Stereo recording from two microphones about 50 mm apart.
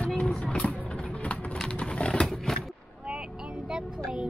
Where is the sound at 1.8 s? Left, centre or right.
Left.